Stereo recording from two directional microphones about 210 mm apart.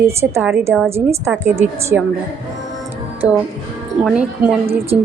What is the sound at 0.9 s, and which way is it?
A woman's voice, 10° right (ahead or behind).